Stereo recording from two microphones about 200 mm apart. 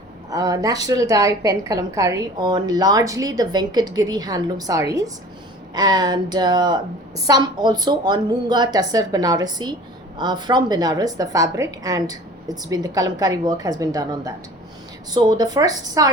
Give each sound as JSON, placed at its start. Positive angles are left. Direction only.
{"t": 0.3, "sound": "a woman's voice", "side_deg": -20}